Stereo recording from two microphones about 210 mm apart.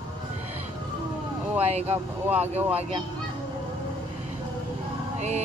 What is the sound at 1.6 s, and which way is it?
A woman's voice, 30° right (ahead or behind).